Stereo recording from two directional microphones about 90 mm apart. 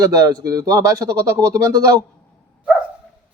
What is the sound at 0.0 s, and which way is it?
Speech, 40° right (ahead or behind).